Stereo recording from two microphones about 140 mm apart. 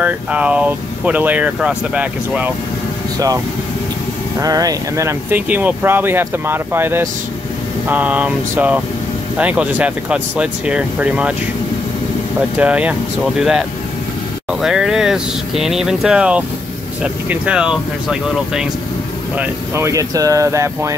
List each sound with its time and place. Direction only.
0.0 s speech: 10° right (ahead or behind)
4.4 s speech: 25° right (ahead or behind); by 11.3 s 10° right (ahead or behind)
12.5 s speech: 10° right (ahead or behind)
19.3 s speech: 20° right (ahead or behind)